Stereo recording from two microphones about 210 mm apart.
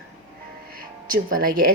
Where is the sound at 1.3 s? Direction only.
40° right (ahead or behind).